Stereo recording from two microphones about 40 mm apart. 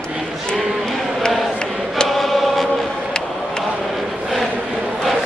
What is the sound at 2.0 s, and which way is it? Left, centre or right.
Choir, centre.